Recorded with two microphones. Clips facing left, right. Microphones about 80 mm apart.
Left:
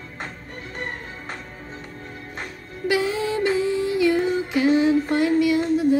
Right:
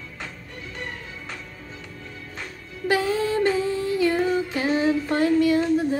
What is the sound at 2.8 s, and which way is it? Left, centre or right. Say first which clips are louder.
Music: even; right.